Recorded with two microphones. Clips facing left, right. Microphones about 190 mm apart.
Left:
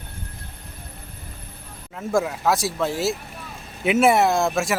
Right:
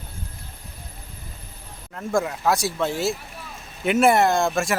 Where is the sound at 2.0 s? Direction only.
5° left (ahead or behind).